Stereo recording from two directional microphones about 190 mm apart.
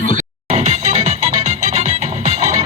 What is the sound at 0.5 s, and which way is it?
Music, 35° right (ahead or behind).